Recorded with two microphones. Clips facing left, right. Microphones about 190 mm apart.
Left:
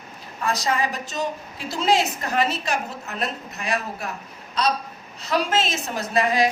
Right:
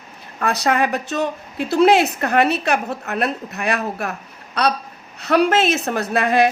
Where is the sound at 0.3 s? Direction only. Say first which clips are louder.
Right 5 dB; 65° right (ahead or behind).